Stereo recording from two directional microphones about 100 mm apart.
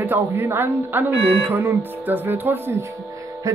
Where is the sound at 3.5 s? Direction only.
30° right (ahead or behind).